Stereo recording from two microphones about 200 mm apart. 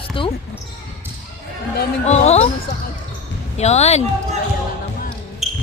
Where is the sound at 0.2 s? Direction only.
25° left (ahead or behind).